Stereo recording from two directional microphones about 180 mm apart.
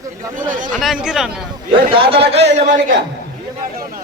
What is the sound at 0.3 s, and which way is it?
Speech, 45° right (ahead or behind).